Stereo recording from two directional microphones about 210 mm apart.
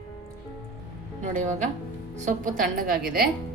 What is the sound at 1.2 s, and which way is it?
A woman's voice, 35° right (ahead or behind).